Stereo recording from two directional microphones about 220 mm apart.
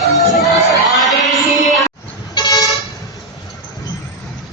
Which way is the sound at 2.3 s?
15° left (ahead or behind).